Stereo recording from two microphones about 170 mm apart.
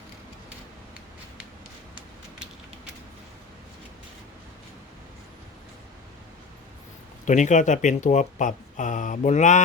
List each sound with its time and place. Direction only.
7.3 s speech: 45° left (ahead or behind)